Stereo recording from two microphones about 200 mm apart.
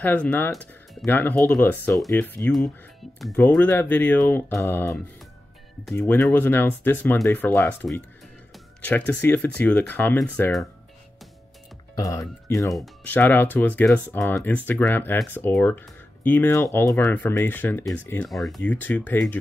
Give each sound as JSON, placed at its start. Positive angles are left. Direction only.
{"t": 0.0, "sound": "speech", "side_deg": 10}
{"t": 11.9, "sound": "speech", "side_deg": 15}
{"t": 12.7, "sound": "speech", "side_deg": 5}